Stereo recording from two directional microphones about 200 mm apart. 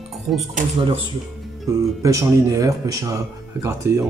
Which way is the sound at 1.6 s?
15° right (ahead or behind).